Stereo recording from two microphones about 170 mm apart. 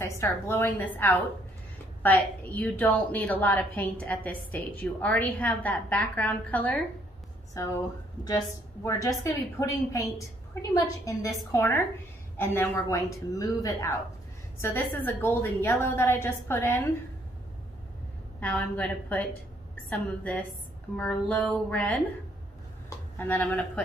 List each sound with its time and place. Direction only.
0.0 s a woman's voice: 15° left (ahead or behind)
7.5 s a woman's voice: 20° left (ahead or behind)
18.4 s a woman's voice: 10° left (ahead or behind)